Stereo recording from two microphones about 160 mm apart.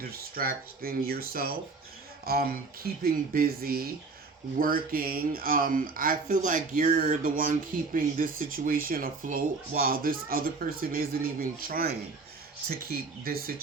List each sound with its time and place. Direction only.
0.0 s speech: 70° right (ahead or behind)